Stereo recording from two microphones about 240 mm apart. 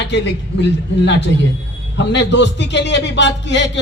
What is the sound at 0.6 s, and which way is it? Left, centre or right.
A man's voice, left.